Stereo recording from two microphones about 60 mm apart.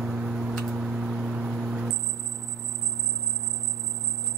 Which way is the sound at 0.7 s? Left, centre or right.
Centre.